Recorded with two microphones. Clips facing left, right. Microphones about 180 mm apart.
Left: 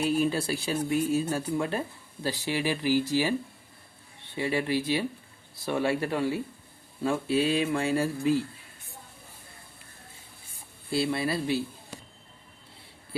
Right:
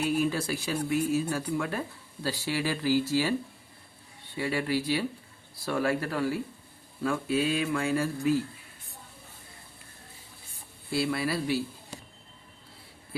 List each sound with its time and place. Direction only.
0.0 s speech: 30° left (ahead or behind)
4.4 s speech: 20° left (ahead or behind)
10.9 s speech: 25° left (ahead or behind)